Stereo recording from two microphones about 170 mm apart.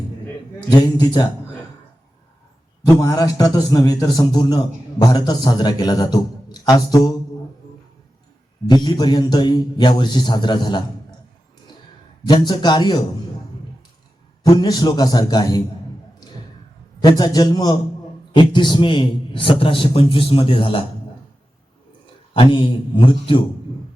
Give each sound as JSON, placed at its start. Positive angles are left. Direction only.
{"t": 0.7, "sound": "a man's voice", "side_deg": 25}
{"t": 2.8, "sound": "a man's voice", "side_deg": 20}
{"t": 8.7, "sound": "a man's voice", "side_deg": 25}
{"t": 12.3, "sound": "a man's voice", "side_deg": 25}
{"t": 14.4, "sound": "a man's voice", "side_deg": 25}
{"t": 17.0, "sound": "a man's voice", "side_deg": 25}
{"t": 22.3, "sound": "a man's voice", "side_deg": 30}